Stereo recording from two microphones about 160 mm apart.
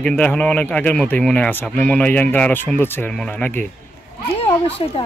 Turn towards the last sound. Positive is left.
turn(degrees=35)  # may be behind; listen again after turning